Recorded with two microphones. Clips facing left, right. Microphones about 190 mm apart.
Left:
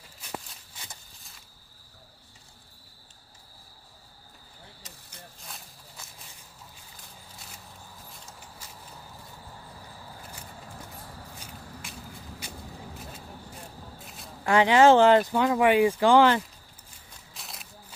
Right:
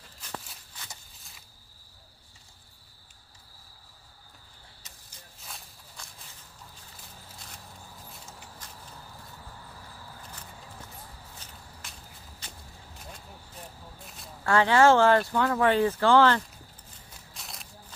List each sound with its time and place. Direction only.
5.4 s walk: centre (ahead or behind)
7.0 s a sound: 5° left (ahead or behind)
11.3 s walk: 10° left (ahead or behind)
14.4 s speech: 15° left (ahead or behind)
17.3 s walk: centre (ahead or behind)